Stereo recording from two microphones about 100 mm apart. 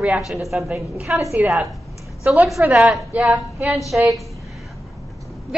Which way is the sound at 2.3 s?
20° right (ahead or behind).